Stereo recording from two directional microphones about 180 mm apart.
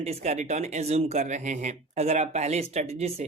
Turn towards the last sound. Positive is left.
turn(degrees=-35)  # may be behind; listen again after turning